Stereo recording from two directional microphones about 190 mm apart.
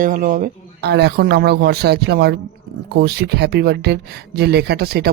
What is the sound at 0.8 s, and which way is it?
Speech, 60° right (ahead or behind).